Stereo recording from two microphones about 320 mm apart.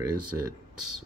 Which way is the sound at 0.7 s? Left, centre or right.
Right.